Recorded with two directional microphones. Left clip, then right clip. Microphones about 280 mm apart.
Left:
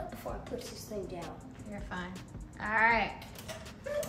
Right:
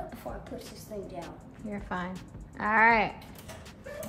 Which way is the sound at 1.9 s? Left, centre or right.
Right.